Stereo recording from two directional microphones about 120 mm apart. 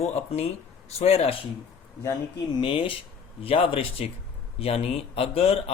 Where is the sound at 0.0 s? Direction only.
65° left (ahead or behind).